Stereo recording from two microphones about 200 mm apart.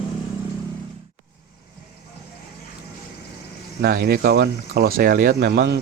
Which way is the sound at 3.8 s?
50° right (ahead or behind).